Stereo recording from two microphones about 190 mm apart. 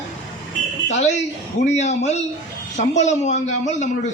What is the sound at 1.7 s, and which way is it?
A man's voice, 35° left (ahead or behind).